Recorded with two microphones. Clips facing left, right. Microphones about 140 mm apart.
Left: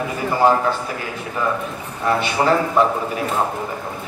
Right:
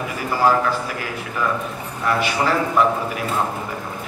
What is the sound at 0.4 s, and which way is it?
Speech, 25° left (ahead or behind).